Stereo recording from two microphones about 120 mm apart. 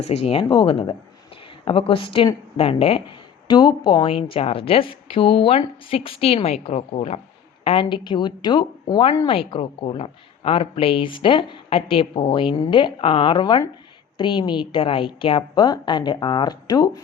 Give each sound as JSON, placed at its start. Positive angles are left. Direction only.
{"t": 0.0, "sound": "speech", "side_deg": 55}
{"t": 3.4, "sound": "a woman's voice", "side_deg": 40}
{"t": 7.6, "sound": "a woman's voice", "side_deg": 50}